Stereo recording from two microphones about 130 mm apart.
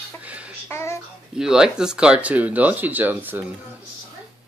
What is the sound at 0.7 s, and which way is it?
Babbling, 20° left (ahead or behind).